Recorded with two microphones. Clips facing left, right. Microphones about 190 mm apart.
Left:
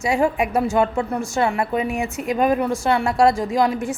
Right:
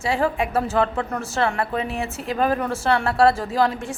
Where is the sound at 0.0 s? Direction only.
15° left (ahead or behind).